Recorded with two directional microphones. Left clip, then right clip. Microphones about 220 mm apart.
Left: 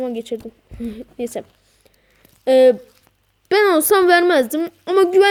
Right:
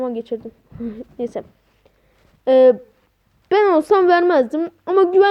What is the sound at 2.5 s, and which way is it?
A woman's voice, 35° left (ahead or behind).